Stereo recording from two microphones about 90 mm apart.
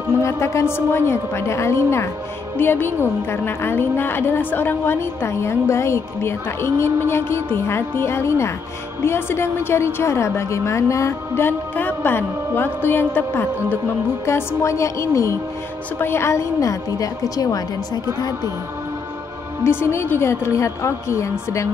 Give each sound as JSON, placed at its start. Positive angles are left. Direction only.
{"t": 0.2, "sound": "a woman's voice", "side_deg": 35}
{"t": 19.6, "sound": "a woman's voice", "side_deg": 25}